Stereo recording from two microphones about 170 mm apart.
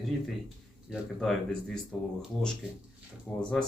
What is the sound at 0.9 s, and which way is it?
Speech, 5° left (ahead or behind).